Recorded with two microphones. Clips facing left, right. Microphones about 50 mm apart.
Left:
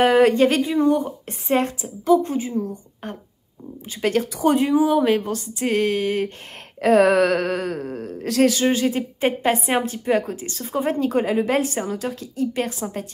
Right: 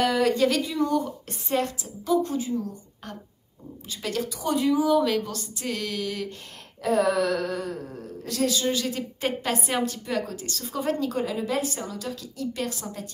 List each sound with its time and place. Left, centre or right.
0.0 s speech: left
6.8 s speech: left